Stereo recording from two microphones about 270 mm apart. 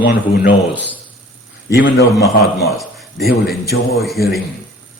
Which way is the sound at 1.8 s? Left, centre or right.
Left.